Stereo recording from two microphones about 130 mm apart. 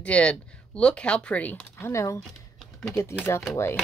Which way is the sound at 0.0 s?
10° left (ahead or behind).